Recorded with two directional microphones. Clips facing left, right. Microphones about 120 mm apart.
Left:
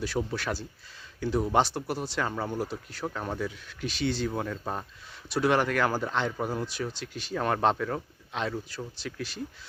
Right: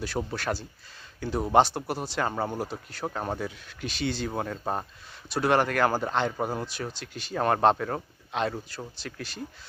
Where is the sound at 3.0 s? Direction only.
35° right (ahead or behind).